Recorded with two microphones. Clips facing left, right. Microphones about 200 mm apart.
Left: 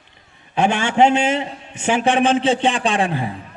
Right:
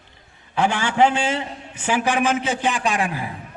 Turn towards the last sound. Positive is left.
turn(degrees=30)  # may be behind; listen again after turning